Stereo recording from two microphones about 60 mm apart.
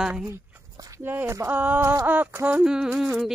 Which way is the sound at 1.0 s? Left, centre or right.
Right.